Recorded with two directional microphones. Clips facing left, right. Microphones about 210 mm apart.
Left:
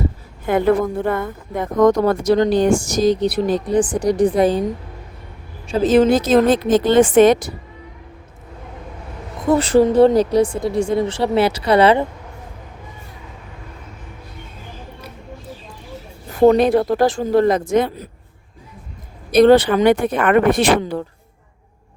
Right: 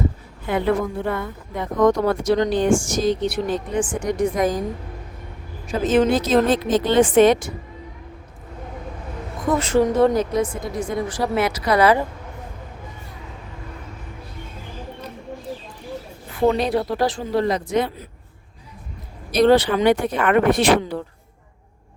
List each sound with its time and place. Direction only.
0.4 s speech: 50° left (ahead or behind); by 4.6 s 30° left (ahead or behind)
5.6 s a woman's voice: 35° left (ahead or behind)
9.6 s speech: 35° left (ahead or behind)
16.3 s a woman's voice: 45° left (ahead or behind)
19.3 s a woman's voice: 55° left (ahead or behind)